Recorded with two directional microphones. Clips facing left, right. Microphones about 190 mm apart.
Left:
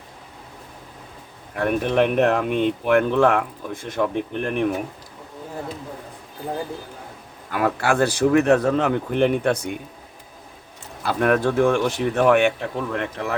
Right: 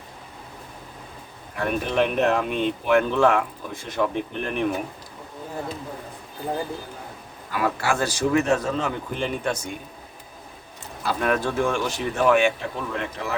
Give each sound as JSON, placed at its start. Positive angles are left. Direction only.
{"t": 1.5, "sound": "speech", "side_deg": 55}
{"t": 7.5, "sound": "speech", "side_deg": 55}
{"t": 11.2, "sound": "speech", "side_deg": 60}